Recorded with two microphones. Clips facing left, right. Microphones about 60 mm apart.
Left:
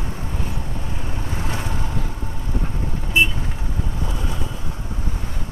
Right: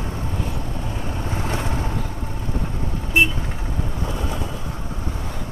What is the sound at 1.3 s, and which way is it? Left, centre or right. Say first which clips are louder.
Vehicle: right 2 dB; right.